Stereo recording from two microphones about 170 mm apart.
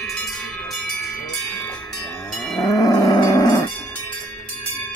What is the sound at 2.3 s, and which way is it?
Livestock, 5° left (ahead or behind).